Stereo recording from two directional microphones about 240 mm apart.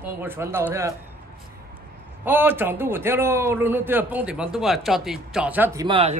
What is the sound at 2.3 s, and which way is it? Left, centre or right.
Speech, centre.